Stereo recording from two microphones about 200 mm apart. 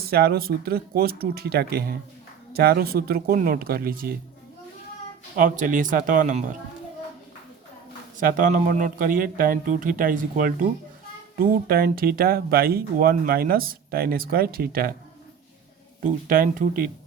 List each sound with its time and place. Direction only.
0.1 s speech: 50° right (ahead or behind)
5.4 s speech: 40° right (ahead or behind)
8.2 s speech: 45° right (ahead or behind)
16.0 s speech: 45° right (ahead or behind)